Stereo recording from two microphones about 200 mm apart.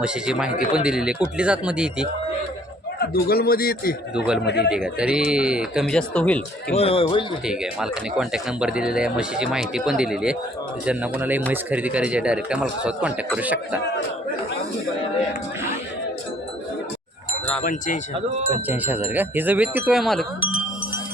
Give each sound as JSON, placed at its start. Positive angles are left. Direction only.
{"t": 0.0, "sound": "speech", "side_deg": -5}
{"t": 3.0, "sound": "a man's voice", "side_deg": 50}
{"t": 4.7, "sound": "speech", "side_deg": -5}
{"t": 6.7, "sound": "speech", "side_deg": 30}
{"t": 7.4, "sound": "a man's voice", "side_deg": -5}
{"t": 17.6, "sound": "wind chime", "side_deg": 40}
{"t": 18.7, "sound": "a man's voice", "side_deg": -10}